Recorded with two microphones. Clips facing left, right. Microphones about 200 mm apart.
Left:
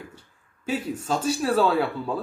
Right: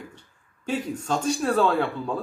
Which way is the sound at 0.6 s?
5° left (ahead or behind).